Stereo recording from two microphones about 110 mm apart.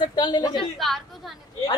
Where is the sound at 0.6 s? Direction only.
Centre (ahead or behind).